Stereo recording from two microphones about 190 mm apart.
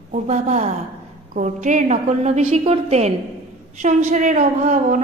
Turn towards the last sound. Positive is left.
turn(degrees=-40)  # may be behind; listen again after turning